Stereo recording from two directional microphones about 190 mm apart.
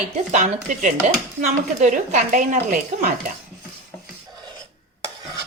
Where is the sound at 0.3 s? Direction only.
40° right (ahead or behind).